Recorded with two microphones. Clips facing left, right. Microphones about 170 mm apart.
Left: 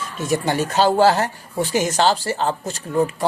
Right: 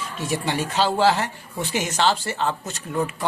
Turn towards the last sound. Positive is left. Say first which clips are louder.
# left 5 dB
turn(degrees=30)  # may be behind; listen again after turning